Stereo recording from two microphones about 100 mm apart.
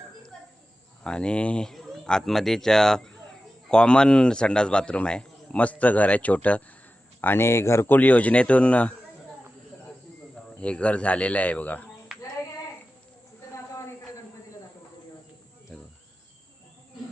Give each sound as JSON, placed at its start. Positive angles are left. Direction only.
{"t": 1.0, "sound": "a man's voice", "side_deg": 10}
{"t": 10.3, "sound": "speech", "side_deg": 10}
{"t": 15.7, "sound": "cricket", "side_deg": 5}